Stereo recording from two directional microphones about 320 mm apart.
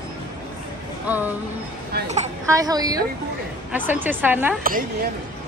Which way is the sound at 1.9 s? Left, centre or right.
Right.